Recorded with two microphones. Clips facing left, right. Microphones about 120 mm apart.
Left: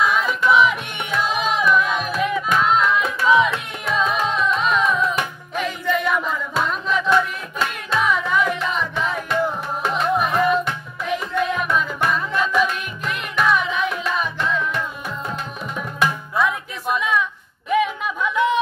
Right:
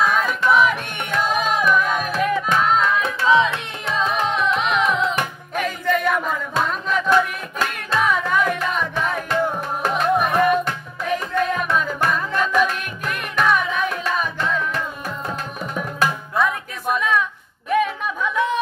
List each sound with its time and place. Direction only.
0.0 s music: 45° right (ahead or behind)
4.3 s music: 65° right (ahead or behind)
5.1 s music: 45° right (ahead or behind)
15.6 s tabla: 40° right (ahead or behind)
16.3 s a sound: 45° right (ahead or behind)